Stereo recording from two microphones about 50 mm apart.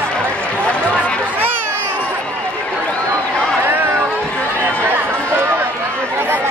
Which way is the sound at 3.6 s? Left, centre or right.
Right.